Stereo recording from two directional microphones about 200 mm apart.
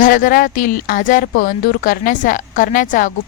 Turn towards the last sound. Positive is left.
turn(degrees=40)  # may be behind; listen again after turning